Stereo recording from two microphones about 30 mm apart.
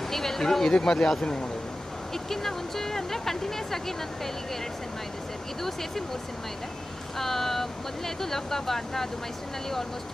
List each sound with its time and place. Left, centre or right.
0.1 s a sound: centre
0.7 s speech: left
2.2 s speech: centre
7.2 s speech: centre